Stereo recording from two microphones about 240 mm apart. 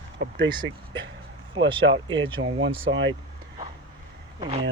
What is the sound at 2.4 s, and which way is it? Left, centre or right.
Speech, right.